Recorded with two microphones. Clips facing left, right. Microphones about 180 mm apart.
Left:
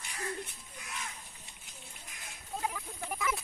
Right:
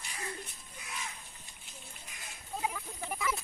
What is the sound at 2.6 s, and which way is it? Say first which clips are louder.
Speech: even; 5° right (ahead or behind).